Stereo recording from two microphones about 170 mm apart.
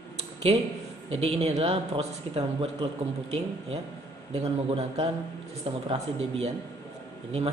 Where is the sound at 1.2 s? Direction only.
40° right (ahead or behind).